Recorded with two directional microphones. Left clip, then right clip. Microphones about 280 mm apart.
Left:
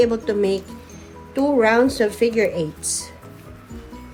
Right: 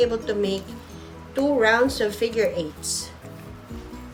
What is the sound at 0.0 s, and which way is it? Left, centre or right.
Speech, centre.